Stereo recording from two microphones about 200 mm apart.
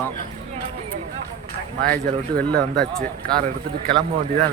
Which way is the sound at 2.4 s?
5° left (ahead or behind).